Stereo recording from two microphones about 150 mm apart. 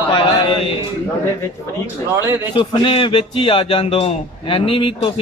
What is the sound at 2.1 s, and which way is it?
Speech, 15° right (ahead or behind).